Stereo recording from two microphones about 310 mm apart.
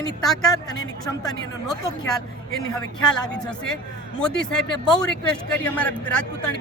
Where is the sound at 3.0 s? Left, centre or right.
Centre.